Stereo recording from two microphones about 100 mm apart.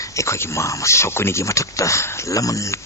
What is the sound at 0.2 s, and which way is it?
A man's voice, 30° left (ahead or behind).